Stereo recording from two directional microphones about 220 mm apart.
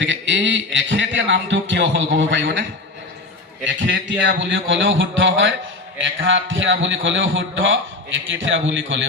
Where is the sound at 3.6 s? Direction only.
55° right (ahead or behind).